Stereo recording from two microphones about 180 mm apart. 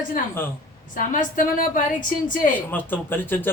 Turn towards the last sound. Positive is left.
turn(degrees=10)  # may be behind; listen again after turning